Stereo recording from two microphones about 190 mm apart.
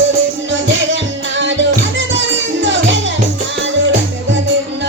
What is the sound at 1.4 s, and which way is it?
Music, 75° right (ahead or behind).